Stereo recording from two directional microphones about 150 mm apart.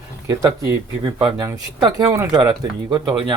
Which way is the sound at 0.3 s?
25° right (ahead or behind).